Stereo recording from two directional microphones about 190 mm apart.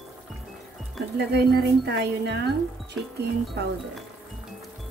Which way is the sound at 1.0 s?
Centre (ahead or behind).